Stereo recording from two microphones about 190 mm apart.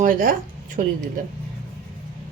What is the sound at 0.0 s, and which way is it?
Speech, 45° right (ahead or behind).